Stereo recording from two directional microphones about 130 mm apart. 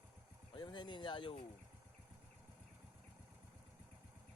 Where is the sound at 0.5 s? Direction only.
35° left (ahead or behind).